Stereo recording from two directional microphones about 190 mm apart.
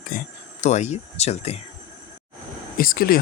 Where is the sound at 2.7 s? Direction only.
50° left (ahead or behind).